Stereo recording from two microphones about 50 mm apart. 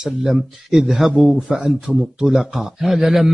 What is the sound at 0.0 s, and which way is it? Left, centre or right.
A man's voice, centre.